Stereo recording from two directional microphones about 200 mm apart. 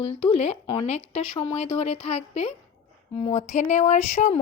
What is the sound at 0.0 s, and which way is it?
Speech, 30° left (ahead or behind).